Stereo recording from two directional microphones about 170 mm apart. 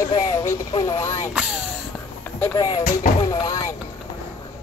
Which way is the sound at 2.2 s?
15° left (ahead or behind).